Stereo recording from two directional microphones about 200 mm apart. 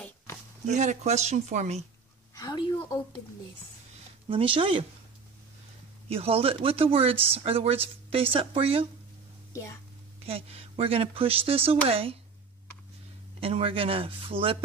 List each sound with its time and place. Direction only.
0.7 s speech: 35° right (ahead or behind)
2.3 s a woman's voice: 20° left (ahead or behind)
4.3 s speech: 25° right (ahead or behind)
6.0 s speech: 30° right (ahead or behind)
10.2 s speech: 30° right (ahead or behind)
13.4 s speech: 30° right (ahead or behind)